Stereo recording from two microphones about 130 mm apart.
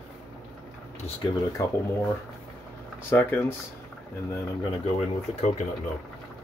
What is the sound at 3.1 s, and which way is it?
Speech, 15° left (ahead or behind).